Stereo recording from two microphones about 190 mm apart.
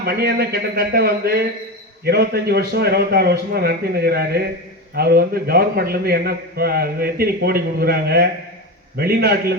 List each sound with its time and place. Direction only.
0.0 s a man's voice: 55° right (ahead or behind)